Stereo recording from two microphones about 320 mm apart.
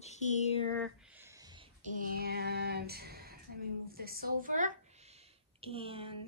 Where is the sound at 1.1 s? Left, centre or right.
Centre; by 3.3 s right.